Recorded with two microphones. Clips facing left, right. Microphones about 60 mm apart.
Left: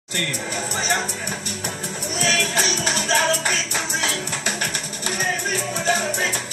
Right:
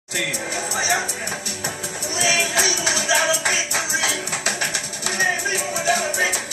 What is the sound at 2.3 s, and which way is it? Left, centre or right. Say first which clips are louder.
Music: even; right.